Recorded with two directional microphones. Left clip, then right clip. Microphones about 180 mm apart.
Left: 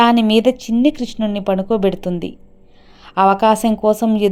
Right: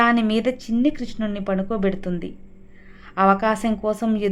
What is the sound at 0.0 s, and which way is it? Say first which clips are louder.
A woman's voice: left 6 dB; 25° left (ahead or behind).